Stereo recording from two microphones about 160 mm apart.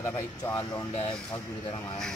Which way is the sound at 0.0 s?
15° left (ahead or behind).